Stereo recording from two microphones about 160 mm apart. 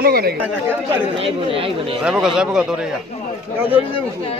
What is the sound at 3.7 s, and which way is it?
Speech, 35° left (ahead or behind).